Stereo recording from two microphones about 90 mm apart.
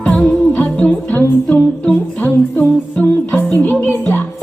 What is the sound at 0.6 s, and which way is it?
Music, 15° left (ahead or behind).